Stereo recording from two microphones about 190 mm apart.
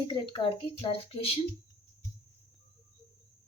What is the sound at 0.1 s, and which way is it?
A woman's voice, 30° left (ahead or behind).